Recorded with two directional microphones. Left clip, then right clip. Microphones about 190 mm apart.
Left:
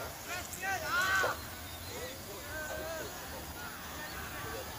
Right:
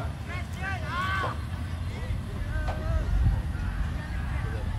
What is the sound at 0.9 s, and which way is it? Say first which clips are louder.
Vehicle: even; 30° right (ahead or behind).